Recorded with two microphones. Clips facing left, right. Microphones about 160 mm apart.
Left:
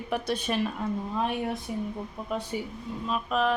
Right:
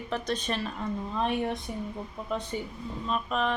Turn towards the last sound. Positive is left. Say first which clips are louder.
# left 2 dB
turn(degrees=5)  # may be behind; listen again after turning